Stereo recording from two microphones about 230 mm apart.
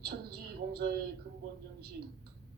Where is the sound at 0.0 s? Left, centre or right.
Right.